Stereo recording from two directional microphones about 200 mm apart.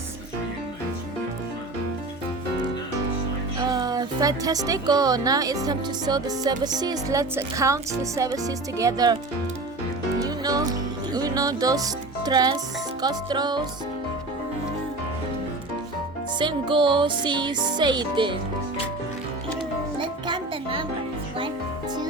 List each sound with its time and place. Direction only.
3.6 s speech: 20° right (ahead or behind)
10.2 s music: 20° right (ahead or behind)
13.0 s speech: 20° right (ahead or behind)
16.4 s speech: 25° right (ahead or behind)
20.0 s music: 25° right (ahead or behind)